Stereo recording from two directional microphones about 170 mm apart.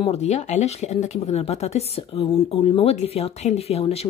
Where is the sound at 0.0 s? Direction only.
40° left (ahead or behind).